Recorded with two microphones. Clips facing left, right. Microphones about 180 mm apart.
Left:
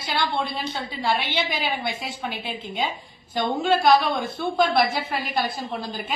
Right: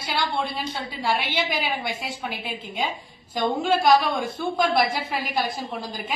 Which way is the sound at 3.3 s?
10° right (ahead or behind).